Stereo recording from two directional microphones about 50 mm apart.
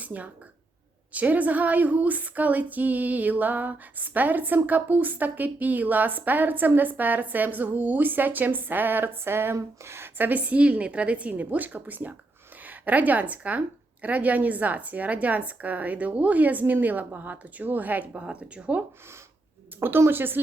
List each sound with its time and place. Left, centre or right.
0.0 s a woman's voice: right
10.2 s a woman's voice: right
18.2 s a woman's voice: right
20.1 s speech: right